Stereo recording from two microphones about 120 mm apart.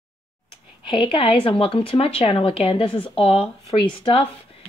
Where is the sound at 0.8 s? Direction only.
45° left (ahead or behind).